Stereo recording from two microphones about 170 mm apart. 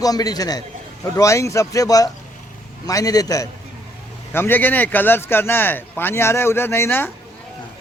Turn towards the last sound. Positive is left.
turn(degrees=15)  # may be behind; listen again after turning